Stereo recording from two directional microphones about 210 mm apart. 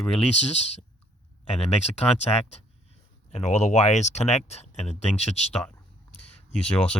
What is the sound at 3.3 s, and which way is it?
Speech, 35° left (ahead or behind).